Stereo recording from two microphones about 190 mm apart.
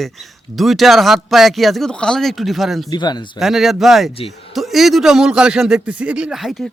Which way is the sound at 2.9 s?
20° left (ahead or behind).